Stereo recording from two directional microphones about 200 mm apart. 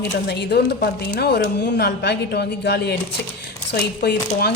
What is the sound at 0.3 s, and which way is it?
Speech, 55° left (ahead or behind).